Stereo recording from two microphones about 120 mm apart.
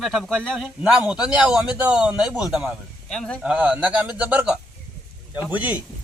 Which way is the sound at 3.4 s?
10° right (ahead or behind).